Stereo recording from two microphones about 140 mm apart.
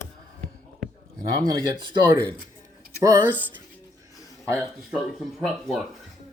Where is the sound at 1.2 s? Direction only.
30° right (ahead or behind).